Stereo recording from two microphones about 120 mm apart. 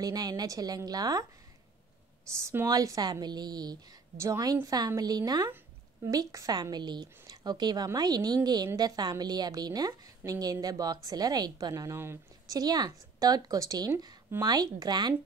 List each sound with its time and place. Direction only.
0.0 s a woman's voice: 30° right (ahead or behind)
2.4 s a woman's voice: 25° right (ahead or behind)
12.5 s a woman's voice: 35° right (ahead or behind)